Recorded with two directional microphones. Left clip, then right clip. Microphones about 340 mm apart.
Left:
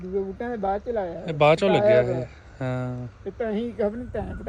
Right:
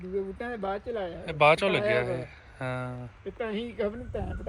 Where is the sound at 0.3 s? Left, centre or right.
Centre.